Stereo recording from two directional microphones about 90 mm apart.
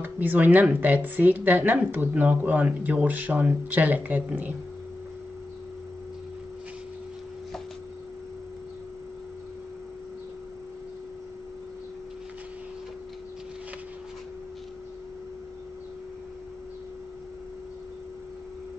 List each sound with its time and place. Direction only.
0.0 s a woman's voice: 20° right (ahead or behind)